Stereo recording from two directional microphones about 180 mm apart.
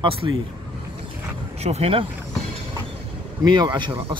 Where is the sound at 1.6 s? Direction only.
35° right (ahead or behind).